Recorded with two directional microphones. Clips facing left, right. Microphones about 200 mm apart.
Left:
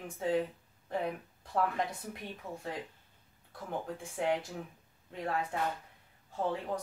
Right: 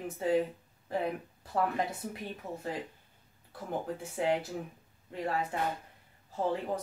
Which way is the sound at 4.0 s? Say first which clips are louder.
Right 2 dB; 5° right (ahead or behind).